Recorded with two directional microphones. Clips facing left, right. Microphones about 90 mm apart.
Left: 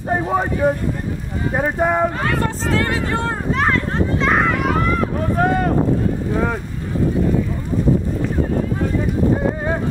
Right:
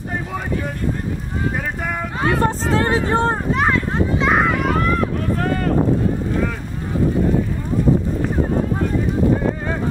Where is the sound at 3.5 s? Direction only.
5° right (ahead or behind).